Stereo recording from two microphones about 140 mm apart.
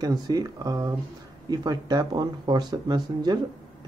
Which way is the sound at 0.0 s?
30° right (ahead or behind).